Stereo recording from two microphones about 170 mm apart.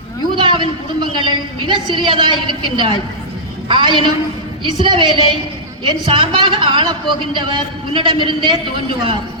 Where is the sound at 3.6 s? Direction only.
30° right (ahead or behind).